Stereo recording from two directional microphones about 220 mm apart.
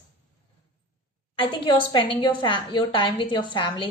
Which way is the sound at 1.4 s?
20° left (ahead or behind).